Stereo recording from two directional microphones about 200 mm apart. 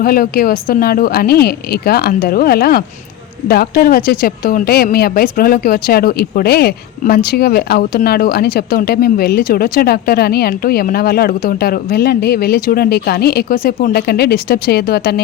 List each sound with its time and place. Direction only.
0.0 s a woman's voice: 45° left (ahead or behind)